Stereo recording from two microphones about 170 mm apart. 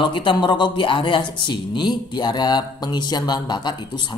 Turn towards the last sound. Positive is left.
turn(degrees=25)  # may be behind; listen again after turning